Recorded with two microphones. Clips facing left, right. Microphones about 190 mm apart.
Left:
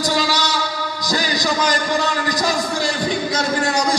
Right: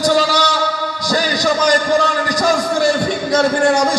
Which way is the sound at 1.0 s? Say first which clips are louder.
Right 5 dB; 45° right (ahead or behind).